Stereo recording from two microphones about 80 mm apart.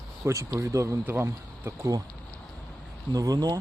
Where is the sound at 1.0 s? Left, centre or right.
Right.